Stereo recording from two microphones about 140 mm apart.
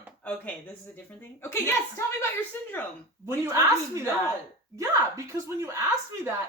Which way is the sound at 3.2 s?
20° right (ahead or behind).